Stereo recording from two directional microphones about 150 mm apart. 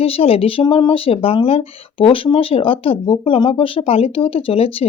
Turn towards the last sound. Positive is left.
turn(degrees=40)  # may be behind; listen again after turning